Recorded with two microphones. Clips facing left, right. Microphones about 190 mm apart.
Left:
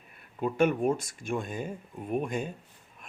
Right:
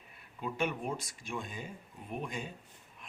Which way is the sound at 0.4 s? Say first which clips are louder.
Left 10 dB; 50° left (ahead or behind).